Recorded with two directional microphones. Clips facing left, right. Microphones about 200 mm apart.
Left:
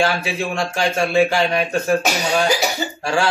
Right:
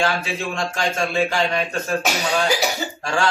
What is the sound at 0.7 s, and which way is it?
A man's voice, 10° left (ahead or behind).